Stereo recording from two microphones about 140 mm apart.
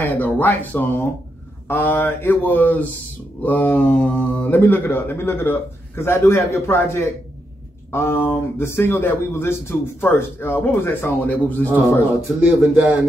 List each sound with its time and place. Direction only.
0.0 s speech: 10° left (ahead or behind)
4.5 s speech: 15° left (ahead or behind)
12.4 s speech: 5° right (ahead or behind)